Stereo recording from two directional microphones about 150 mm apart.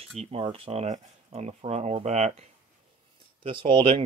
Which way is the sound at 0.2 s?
40° right (ahead or behind).